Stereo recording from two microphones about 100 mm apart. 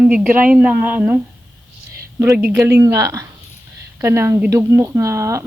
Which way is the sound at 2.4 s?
25° right (ahead or behind).